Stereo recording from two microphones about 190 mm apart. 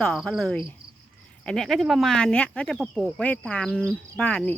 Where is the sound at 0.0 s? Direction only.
5° left (ahead or behind).